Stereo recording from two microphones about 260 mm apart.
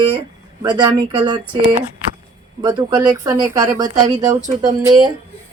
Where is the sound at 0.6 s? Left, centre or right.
Centre.